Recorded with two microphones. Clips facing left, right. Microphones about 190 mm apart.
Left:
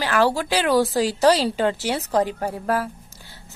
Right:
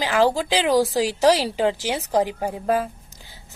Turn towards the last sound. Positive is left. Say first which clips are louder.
# left 2 dB
turn(degrees=-15)  # may be behind; listen again after turning